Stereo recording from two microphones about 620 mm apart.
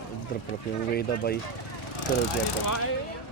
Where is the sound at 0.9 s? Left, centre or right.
Centre.